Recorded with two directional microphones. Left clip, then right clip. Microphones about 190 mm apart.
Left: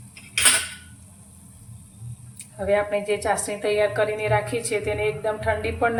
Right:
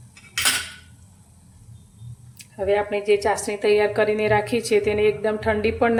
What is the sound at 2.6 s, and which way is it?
A woman's voice, 50° right (ahead or behind).